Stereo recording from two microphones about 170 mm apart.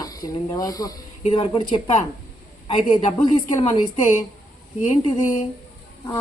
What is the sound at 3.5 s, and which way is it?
Speech, 25° left (ahead or behind).